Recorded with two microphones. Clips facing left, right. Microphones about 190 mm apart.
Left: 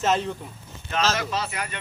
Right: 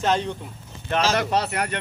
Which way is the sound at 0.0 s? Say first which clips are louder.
Right 1 dB; centre (ahead or behind).